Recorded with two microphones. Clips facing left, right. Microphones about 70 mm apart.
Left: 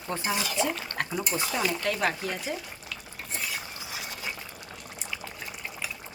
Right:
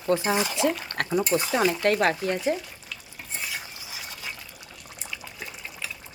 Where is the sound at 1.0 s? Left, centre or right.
Right.